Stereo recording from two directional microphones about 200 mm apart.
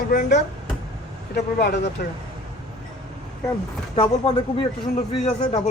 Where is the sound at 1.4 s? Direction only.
55° left (ahead or behind).